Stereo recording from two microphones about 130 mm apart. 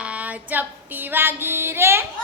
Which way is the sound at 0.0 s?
10° right (ahead or behind).